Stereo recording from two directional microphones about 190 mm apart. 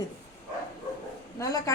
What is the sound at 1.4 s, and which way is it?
Speech, 15° left (ahead or behind).